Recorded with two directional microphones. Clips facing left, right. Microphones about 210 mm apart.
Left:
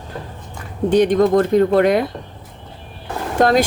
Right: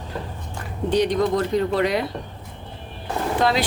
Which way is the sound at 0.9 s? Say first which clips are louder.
Left 6 dB; 50° left (ahead or behind).